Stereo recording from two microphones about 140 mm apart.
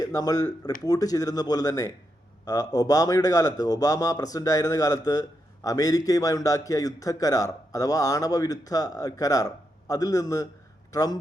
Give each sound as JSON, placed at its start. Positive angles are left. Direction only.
{"t": 0.0, "sound": "speech", "side_deg": 25}